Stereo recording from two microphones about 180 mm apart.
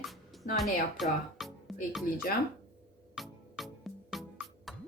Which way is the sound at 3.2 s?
Centre (ahead or behind).